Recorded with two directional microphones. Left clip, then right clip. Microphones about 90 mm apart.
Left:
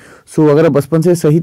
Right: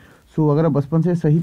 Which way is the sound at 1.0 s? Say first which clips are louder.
Left 10 dB; 45° left (ahead or behind).